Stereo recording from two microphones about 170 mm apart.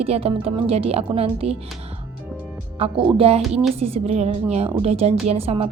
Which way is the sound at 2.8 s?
30° right (ahead or behind).